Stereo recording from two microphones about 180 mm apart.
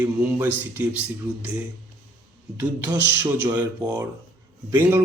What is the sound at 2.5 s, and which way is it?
A man's voice, 10° right (ahead or behind).